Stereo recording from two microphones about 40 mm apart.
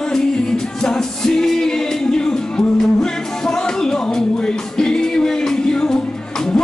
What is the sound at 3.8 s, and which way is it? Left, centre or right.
Music, centre.